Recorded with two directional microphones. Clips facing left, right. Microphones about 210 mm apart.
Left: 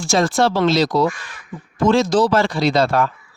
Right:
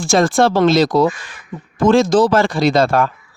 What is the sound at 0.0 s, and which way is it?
Speech, 50° right (ahead or behind).